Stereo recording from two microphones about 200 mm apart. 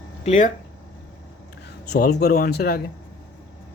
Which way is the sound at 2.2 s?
50° left (ahead or behind).